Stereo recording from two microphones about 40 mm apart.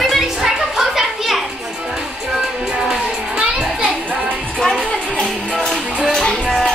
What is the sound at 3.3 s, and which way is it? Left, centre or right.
Music, right.